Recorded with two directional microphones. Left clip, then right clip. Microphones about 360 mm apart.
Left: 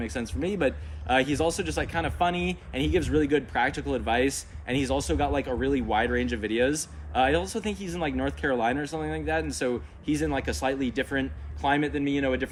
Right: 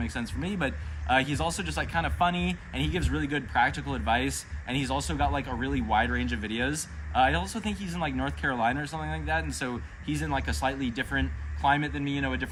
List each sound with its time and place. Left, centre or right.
0.0 s speech: centre